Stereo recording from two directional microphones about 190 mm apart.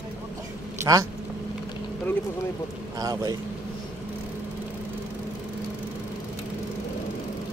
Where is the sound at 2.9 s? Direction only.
20° right (ahead or behind).